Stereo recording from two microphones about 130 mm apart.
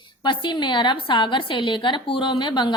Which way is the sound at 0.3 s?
35° left (ahead or behind).